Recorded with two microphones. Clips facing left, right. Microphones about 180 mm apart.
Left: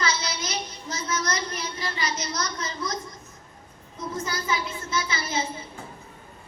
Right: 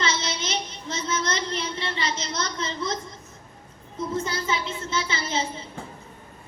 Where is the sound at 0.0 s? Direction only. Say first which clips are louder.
Right 1 dB; 25° right (ahead or behind).